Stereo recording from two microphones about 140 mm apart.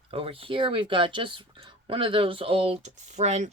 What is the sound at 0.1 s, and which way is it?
Speech, 45° right (ahead or behind).